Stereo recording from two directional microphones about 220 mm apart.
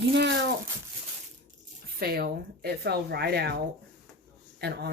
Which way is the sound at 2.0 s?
45° right (ahead or behind).